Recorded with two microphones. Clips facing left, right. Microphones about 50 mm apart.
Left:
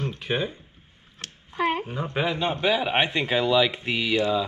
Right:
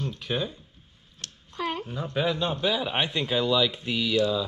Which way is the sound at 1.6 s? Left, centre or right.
Left.